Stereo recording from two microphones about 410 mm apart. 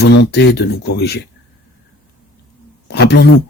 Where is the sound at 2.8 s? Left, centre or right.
Left.